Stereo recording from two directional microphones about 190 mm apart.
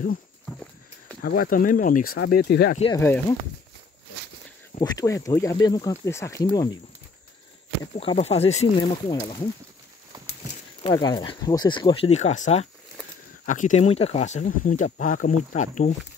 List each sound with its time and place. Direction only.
1.2 s speech: 50° left (ahead or behind)
2.1 s speech: 55° left (ahead or behind)
3.0 s speech: 15° left (ahead or behind)
4.7 s speech: 20° left (ahead or behind)
7.8 s speech: 30° left (ahead or behind)
10.1 s a sound: 20° right (ahead or behind)
10.8 s speech: 25° left (ahead or behind)